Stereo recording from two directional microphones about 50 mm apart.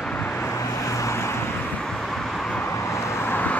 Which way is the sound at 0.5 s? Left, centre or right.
Left.